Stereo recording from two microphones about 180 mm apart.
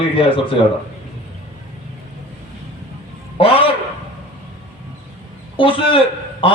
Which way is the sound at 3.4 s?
30° left (ahead or behind).